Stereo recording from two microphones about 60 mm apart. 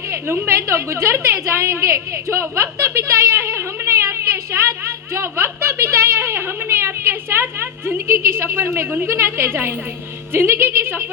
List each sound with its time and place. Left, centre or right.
0.4 s a woman's voice: right